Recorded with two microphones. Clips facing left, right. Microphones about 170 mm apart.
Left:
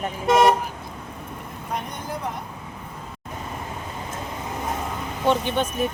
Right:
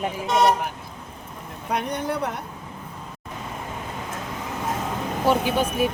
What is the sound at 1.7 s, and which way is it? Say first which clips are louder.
Speech: right 5 dB; 70° right (ahead or behind).